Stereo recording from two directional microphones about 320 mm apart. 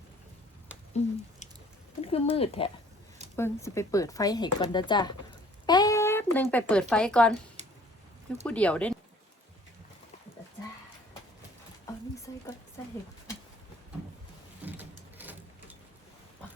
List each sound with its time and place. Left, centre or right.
1.0 s squish: left
2.0 s speech: centre
7.6 s a sound: right
8.4 s speech: centre
14.6 s vehicle: centre